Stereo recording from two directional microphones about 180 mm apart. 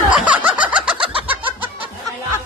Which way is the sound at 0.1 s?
5° right (ahead or behind).